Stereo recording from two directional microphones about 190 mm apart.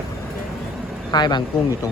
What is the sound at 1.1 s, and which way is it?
Speech, 20° left (ahead or behind).